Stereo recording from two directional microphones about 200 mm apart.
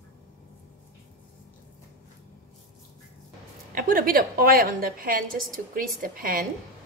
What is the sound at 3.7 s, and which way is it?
A woman's voice, 45° right (ahead or behind).